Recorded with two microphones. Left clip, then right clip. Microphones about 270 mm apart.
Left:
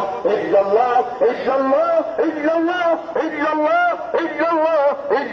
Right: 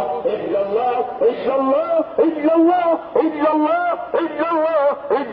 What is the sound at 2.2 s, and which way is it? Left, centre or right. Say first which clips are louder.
A man's voice: right 3 dB; centre.